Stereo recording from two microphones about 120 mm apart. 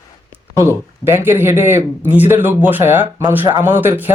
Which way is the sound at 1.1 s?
20° right (ahead or behind).